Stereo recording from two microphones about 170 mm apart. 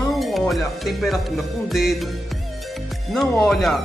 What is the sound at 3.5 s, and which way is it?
Music, centre (ahead or behind).